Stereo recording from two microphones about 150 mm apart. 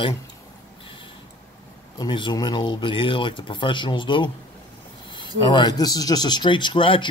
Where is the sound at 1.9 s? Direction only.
30° left (ahead or behind).